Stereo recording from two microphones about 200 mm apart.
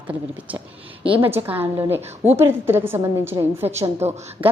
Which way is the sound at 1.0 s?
25° right (ahead or behind).